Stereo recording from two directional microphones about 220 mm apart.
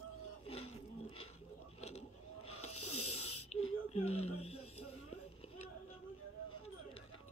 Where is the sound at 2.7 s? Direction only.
90° left.